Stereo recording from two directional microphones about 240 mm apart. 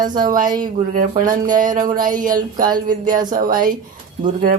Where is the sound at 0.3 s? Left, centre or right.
Right.